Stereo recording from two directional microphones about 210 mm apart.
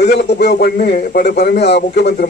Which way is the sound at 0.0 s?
50° left (ahead or behind).